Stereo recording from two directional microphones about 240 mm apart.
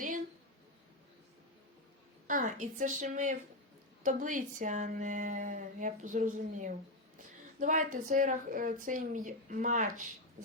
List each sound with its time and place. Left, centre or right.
2.2 s speech: right